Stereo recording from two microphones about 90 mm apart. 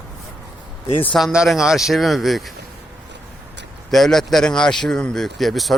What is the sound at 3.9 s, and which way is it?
Speech, 5° left (ahead or behind).